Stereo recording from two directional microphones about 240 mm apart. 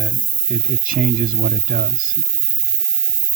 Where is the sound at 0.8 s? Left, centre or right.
Right.